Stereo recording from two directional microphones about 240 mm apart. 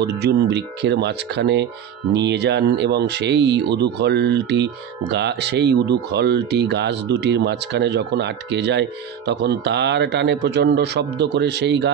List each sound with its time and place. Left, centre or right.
0.0 s speech: right